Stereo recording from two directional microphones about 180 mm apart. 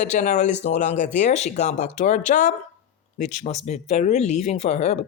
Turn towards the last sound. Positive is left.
turn(degrees=40)  # may be behind; listen again after turning